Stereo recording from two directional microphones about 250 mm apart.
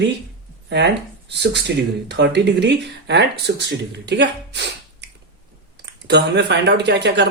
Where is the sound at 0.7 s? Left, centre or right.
Right.